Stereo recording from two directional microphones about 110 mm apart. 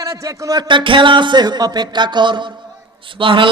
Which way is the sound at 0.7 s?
50° right (ahead or behind).